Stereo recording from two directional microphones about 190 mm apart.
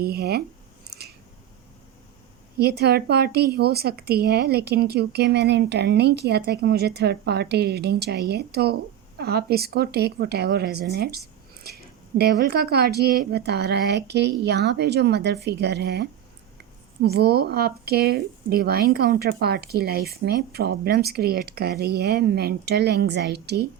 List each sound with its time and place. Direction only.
0.0 s speech: 55° right (ahead or behind)
2.6 s speech: 55° right (ahead or behind)